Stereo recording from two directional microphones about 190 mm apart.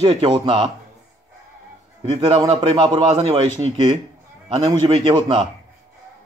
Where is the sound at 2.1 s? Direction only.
25° right (ahead or behind).